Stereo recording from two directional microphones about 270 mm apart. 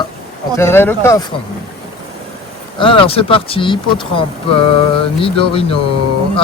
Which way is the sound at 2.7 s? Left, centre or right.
Centre.